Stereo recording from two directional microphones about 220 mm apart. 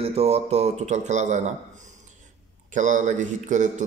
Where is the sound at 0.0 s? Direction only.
30° right (ahead or behind).